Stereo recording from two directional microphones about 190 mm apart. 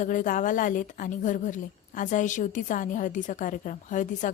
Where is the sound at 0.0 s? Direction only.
45° left (ahead or behind).